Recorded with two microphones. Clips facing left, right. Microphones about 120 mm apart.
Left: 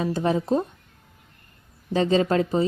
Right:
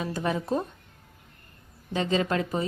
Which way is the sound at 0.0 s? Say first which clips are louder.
Left 5 dB; 30° left (ahead or behind).